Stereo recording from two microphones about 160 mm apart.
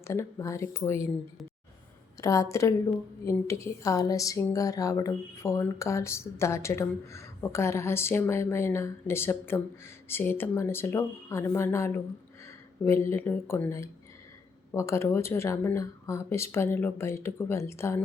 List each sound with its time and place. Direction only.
0.1 s a woman's voice: 15° left (ahead or behind)
2.2 s a woman's voice: 20° left (ahead or behind)